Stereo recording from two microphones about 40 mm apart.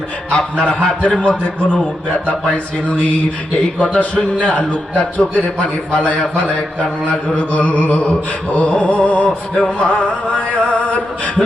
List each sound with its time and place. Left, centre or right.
0.3 s a man's voice: left
3.9 s a sound: left
5.9 s a man's voice: left
7.1 s a sound: left
9.6 s a man's voice: left
10.3 s music: left